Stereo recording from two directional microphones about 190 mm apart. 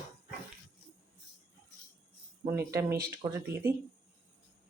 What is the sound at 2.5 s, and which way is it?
Speech, 15° right (ahead or behind).